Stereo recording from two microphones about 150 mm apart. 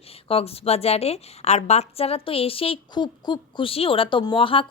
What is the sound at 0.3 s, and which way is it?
A woman's voice, 40° left (ahead or behind).